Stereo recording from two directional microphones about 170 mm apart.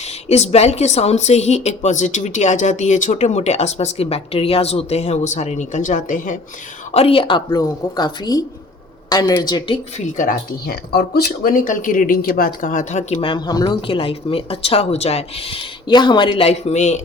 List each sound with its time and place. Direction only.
0.0 s speech: 40° left (ahead or behind)
6.9 s a woman's voice: 35° left (ahead or behind)
10.2 s speech: 60° left (ahead or behind); by 13.2 s 45° left (ahead or behind)
13.2 s speech: 25° left (ahead or behind); by 17.0 s 45° left (ahead or behind)